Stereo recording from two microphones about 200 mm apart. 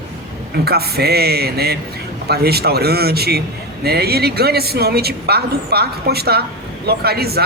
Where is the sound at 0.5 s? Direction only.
50° right (ahead or behind).